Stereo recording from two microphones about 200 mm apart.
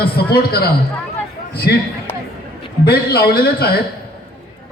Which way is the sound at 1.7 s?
50° left (ahead or behind).